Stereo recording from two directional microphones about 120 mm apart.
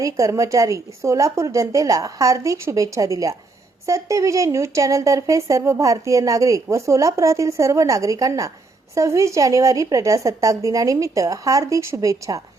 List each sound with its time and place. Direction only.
0.0 s speech: 25° right (ahead or behind)